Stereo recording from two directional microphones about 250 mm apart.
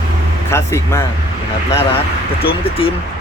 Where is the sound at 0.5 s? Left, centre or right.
Centre.